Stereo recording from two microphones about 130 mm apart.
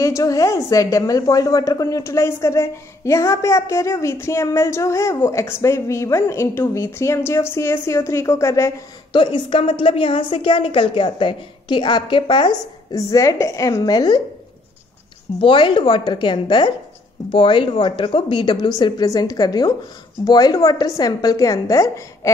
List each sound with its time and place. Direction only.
0.0 s a woman's voice: 25° left (ahead or behind)
9.1 s a woman's voice: 40° left (ahead or behind)
15.4 s a woman's voice: 40° left (ahead or behind); by 22.3 s 25° left (ahead or behind)